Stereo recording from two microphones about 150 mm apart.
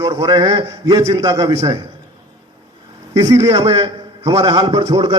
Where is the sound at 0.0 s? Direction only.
30° right (ahead or behind).